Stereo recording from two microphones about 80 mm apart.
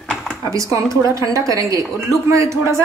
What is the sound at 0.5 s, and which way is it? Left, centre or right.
A woman's voice, right.